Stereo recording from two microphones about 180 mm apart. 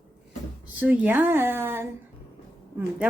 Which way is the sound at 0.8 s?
10° right (ahead or behind).